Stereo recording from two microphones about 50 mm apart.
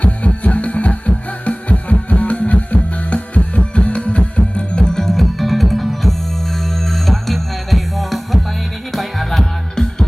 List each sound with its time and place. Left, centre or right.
0.0 s music: left